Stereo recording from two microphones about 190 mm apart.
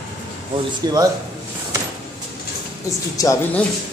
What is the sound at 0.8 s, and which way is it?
Speech, 20° right (ahead or behind).